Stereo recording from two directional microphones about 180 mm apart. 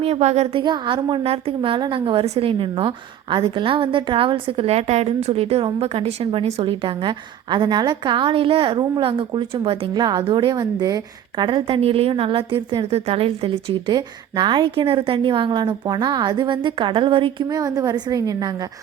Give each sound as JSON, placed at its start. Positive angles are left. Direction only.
{"t": 0.0, "sound": "a woman's voice", "side_deg": -35}
{"t": 0.6, "sound": "a woman's voice", "side_deg": -25}